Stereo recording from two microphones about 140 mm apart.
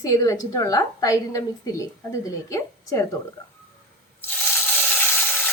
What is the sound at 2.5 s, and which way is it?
Speech, 20° left (ahead or behind).